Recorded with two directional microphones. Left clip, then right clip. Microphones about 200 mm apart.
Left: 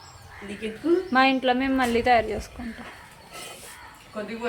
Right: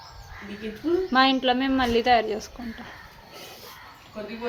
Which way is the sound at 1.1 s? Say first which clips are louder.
Right 1 dB; 5° right (ahead or behind).